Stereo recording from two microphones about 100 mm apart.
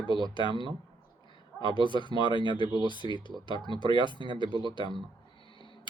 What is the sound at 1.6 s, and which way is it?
Speech, 50° left (ahead or behind).